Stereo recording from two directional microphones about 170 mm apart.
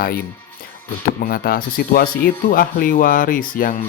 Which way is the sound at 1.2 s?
60° left (ahead or behind).